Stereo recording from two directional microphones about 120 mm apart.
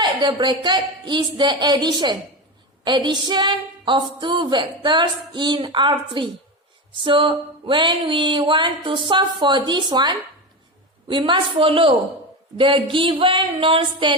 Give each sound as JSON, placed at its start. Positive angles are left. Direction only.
{"t": 0.0, "sound": "a woman's voice", "side_deg": -40}